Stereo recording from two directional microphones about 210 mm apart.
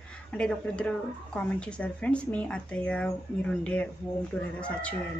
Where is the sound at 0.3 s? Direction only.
5° left (ahead or behind).